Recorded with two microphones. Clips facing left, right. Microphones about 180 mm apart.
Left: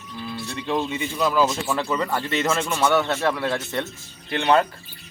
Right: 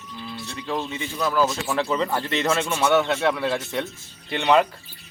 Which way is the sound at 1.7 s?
5° right (ahead or behind).